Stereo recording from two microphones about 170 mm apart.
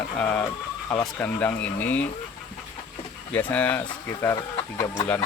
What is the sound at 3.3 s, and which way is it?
Speech, 10° left (ahead or behind).